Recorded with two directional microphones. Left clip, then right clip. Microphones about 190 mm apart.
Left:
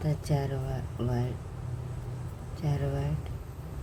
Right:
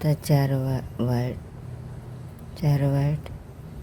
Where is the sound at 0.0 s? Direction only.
45° right (ahead or behind).